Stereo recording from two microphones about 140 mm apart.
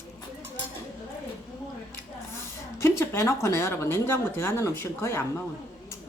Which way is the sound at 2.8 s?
20° left (ahead or behind).